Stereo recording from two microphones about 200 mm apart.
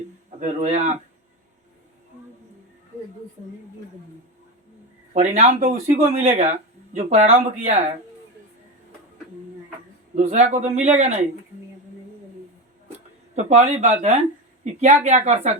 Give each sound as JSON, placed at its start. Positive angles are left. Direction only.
{"t": 0.3, "sound": "a man's voice", "side_deg": -35}
{"t": 5.1, "sound": "speech", "side_deg": -35}
{"t": 10.2, "sound": "speech", "side_deg": -35}
{"t": 13.3, "sound": "speech", "side_deg": -35}